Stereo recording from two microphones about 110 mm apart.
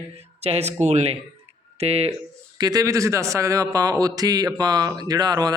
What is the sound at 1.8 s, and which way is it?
Speech, 70° right (ahead or behind).